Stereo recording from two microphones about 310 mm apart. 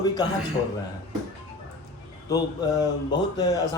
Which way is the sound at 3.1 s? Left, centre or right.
Centre.